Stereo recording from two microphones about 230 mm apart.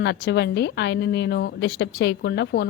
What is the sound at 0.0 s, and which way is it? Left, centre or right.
A woman's voice, left.